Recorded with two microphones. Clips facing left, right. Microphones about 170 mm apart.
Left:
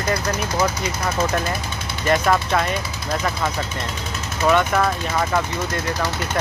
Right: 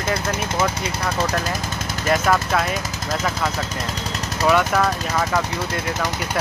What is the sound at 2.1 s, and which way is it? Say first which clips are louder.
Speech: left 1 dB; centre (ahead or behind).